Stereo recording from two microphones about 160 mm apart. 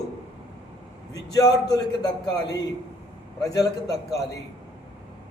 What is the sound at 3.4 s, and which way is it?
Speech, 25° left (ahead or behind).